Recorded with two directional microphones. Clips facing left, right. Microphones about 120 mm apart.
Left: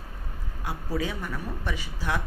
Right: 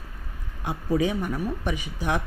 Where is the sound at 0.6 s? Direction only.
20° right (ahead or behind).